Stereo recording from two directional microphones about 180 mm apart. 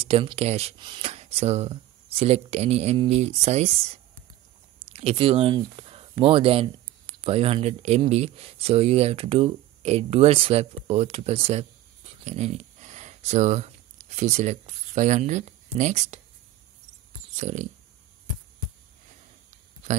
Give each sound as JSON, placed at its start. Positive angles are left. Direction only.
{"t": 0.0, "sound": "speech", "side_deg": -30}
{"t": 4.9, "sound": "speech", "side_deg": -30}
{"t": 17.4, "sound": "dog", "side_deg": -40}